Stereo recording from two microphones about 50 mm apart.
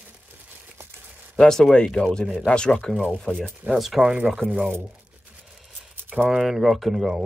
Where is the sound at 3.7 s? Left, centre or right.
Centre.